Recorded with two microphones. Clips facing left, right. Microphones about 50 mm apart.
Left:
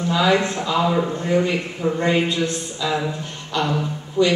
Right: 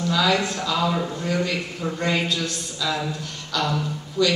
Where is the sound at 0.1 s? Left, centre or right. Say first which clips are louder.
Left 4 dB; left.